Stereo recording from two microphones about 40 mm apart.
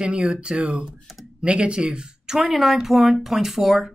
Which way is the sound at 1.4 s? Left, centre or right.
Right.